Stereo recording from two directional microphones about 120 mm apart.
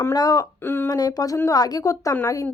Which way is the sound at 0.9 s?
35° left (ahead or behind).